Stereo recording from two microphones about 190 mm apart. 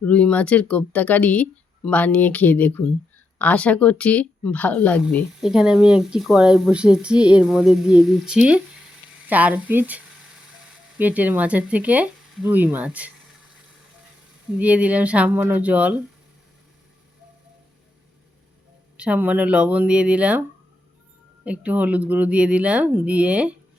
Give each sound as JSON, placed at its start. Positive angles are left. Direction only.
{"t": 0.0, "sound": "speech", "side_deg": 5}
{"t": 5.4, "sound": "a woman's voice", "side_deg": -5}
{"t": 14.6, "sound": "speech", "side_deg": -5}
{"t": 18.9, "sound": "speech", "side_deg": -5}
{"t": 21.4, "sound": "speech", "side_deg": -5}